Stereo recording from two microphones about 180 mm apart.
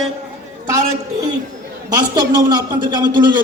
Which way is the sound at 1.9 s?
20° right (ahead or behind).